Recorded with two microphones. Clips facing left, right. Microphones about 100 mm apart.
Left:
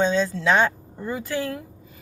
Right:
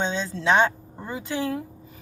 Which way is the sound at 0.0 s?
20° right (ahead or behind).